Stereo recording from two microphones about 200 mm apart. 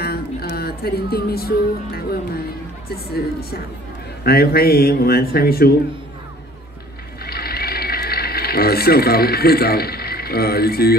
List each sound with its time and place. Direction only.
0.0 s music: 50° left (ahead or behind)
2.9 s a man's voice: 50° left (ahead or behind)
7.2 s a sound: 50° left (ahead or behind)